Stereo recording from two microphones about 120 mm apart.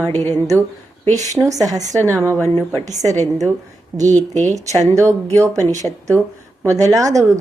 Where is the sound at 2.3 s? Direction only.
15° left (ahead or behind).